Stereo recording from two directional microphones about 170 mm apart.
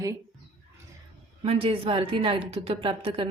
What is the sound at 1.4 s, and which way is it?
A woman's voice, 35° right (ahead or behind).